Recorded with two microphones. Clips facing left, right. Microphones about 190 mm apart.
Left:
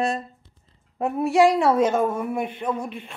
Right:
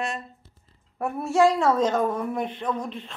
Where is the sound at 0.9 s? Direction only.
20° left (ahead or behind).